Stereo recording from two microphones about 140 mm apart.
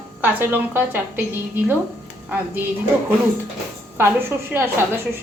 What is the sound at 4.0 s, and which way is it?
A woman's voice, 15° right (ahead or behind).